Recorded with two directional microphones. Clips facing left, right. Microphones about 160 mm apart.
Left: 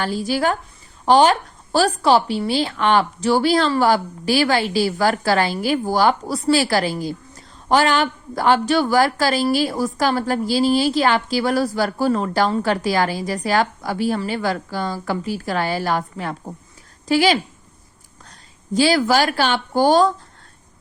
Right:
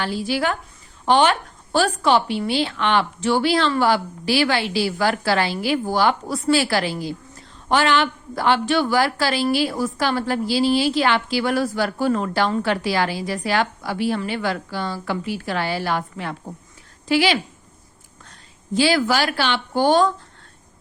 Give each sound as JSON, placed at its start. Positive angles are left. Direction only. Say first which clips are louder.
{"t": 0.0, "sound": "a woman's voice", "louder": "left 2 dB", "side_deg": 40}